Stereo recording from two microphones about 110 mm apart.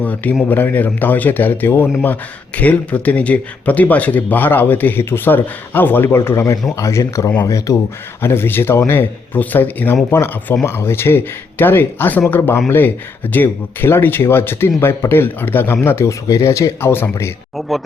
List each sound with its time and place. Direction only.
0.0 s speech: 15° left (ahead or behind)
17.6 s speech: centre (ahead or behind)